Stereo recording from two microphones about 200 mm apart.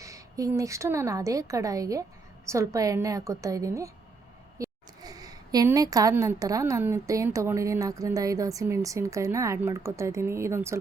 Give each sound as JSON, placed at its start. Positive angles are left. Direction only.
{"t": 0.0, "sound": "a woman's voice", "side_deg": -15}